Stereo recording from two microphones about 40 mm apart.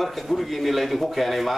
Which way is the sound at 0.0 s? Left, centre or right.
Centre.